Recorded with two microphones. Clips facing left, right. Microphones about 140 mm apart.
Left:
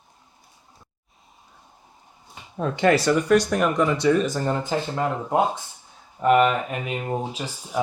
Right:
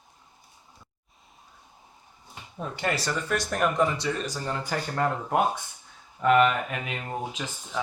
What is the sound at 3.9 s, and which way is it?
Speech, 65° left (ahead or behind).